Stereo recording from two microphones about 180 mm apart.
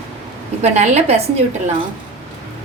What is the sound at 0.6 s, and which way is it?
Speech, 40° right (ahead or behind).